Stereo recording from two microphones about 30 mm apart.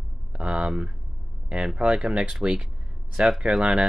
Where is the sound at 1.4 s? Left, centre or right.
Right.